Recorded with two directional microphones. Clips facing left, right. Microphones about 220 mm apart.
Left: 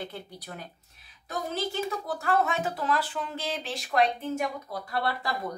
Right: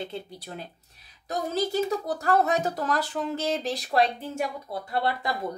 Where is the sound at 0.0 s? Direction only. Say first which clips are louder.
Right 3 dB; 25° right (ahead or behind).